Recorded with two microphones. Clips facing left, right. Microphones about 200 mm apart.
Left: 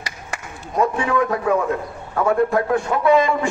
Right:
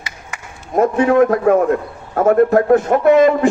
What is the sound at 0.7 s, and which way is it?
Speech, 50° right (ahead or behind).